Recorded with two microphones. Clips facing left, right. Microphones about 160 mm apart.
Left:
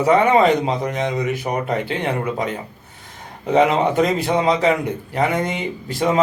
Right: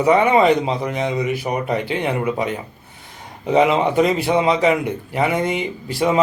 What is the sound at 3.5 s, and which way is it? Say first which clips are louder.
Speech: even; 5° right (ahead or behind).